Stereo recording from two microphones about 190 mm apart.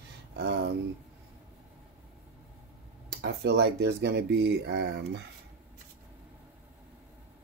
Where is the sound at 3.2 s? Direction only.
65° right (ahead or behind).